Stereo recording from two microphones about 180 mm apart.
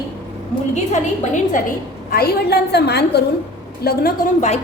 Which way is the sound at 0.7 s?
40° left (ahead or behind).